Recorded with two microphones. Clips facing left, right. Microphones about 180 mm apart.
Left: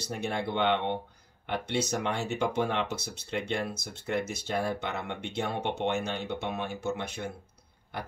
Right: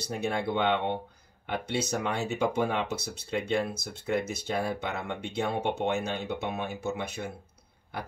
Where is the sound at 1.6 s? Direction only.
55° right (ahead or behind).